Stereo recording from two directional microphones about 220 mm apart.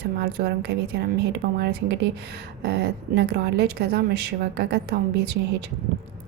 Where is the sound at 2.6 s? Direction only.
50° right (ahead or behind).